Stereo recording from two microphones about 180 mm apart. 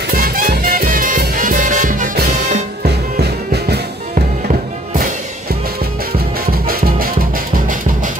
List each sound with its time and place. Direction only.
0.1 s music: 55° right (ahead or behind)
2.8 s music: 65° right (ahead or behind)
6.4 s music: 55° right (ahead or behind)